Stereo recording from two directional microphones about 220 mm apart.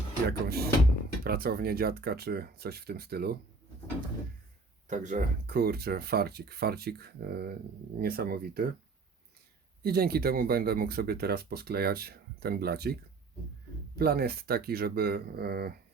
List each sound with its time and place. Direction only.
0.3 s speech: 45° right (ahead or behind)
4.9 s speech: 35° right (ahead or behind)
9.8 s speech: 45° right (ahead or behind)